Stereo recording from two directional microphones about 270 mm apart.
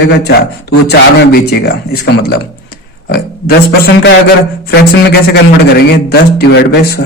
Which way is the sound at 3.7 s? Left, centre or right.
Left.